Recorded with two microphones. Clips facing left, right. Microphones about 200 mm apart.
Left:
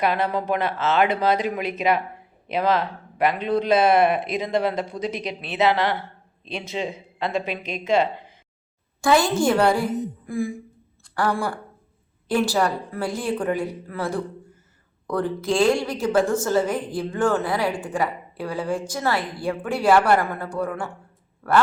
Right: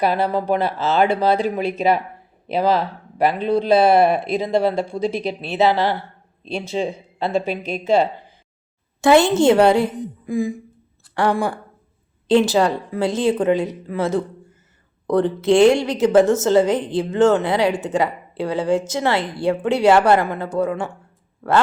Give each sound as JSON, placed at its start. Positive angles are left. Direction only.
{"t": 0.0, "sound": "speech", "side_deg": -35}
{"t": 9.0, "sound": "a woman's voice", "side_deg": -25}